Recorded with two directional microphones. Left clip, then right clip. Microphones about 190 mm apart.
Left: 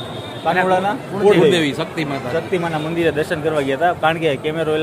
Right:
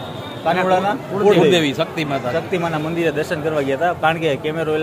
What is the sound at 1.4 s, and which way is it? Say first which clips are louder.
Music: even; 25° right (ahead or behind).